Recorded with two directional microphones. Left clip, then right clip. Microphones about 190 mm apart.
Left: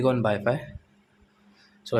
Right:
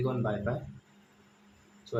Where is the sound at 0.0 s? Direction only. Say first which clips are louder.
Left 9 dB; 45° left (ahead or behind).